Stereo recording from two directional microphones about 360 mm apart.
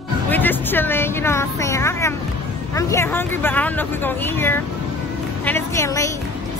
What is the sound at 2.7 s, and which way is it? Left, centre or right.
A woman's voice, centre.